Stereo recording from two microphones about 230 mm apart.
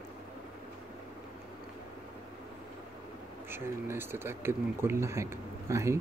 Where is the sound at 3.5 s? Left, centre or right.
Centre.